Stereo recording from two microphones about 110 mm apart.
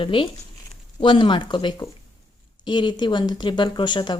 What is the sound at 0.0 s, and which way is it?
A woman's voice, 50° left (ahead or behind).